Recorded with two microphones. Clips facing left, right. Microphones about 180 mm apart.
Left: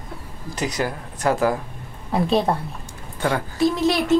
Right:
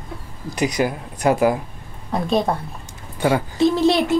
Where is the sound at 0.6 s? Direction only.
15° right (ahead or behind).